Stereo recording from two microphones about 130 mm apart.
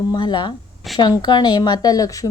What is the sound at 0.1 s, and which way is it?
Speech, 35° left (ahead or behind).